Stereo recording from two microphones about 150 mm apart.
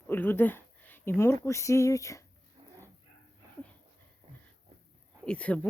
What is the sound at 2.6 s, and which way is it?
Dog, 40° right (ahead or behind).